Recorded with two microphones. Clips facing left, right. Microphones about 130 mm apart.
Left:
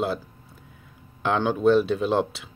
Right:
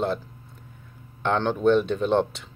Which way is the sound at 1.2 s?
5° left (ahead or behind).